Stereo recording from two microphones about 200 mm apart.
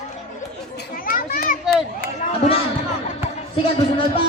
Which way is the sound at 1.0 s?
45° left (ahead or behind).